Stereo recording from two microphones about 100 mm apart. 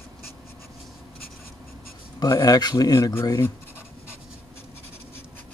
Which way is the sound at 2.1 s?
40° left (ahead or behind).